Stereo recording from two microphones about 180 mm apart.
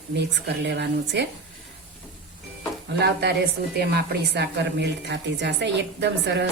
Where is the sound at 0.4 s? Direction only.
70° right (ahead or behind).